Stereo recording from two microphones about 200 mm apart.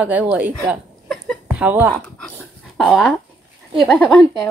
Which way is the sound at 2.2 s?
Centre (ahead or behind).